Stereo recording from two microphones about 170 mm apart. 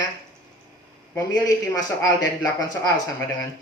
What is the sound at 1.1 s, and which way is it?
Speech, 20° left (ahead or behind).